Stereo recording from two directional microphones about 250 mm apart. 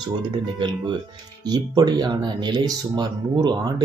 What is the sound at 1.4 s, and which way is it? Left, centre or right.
Speech, centre.